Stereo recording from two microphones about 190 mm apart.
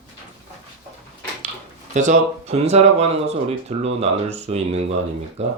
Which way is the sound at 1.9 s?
40° right (ahead or behind).